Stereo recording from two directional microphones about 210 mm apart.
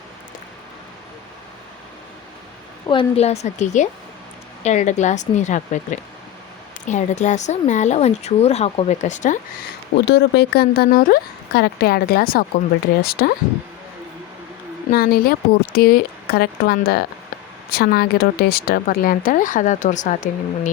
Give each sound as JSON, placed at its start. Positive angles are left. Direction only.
{"t": 2.8, "sound": "speech", "side_deg": 25}
{"t": 10.1, "sound": "a woman's voice", "side_deg": 50}
{"t": 14.9, "sound": "a woman's voice", "side_deg": 45}